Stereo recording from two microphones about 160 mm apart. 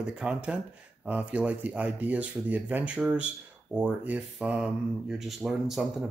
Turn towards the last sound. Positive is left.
turn(degrees=0)  # may be behind; listen again after turning